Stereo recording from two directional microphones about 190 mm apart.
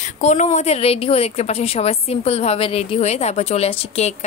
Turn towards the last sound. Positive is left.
turn(degrees=30)  # may be behind; listen again after turning